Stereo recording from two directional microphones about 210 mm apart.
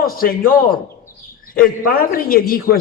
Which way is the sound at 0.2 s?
45° left (ahead or behind).